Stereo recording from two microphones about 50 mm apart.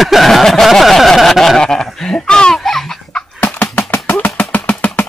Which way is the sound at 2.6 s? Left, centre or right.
Centre.